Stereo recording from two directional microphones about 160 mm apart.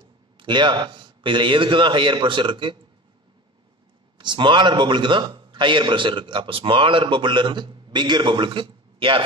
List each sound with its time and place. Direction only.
0.4 s a man's voice: 30° right (ahead or behind)
4.2 s a man's voice: 30° right (ahead or behind)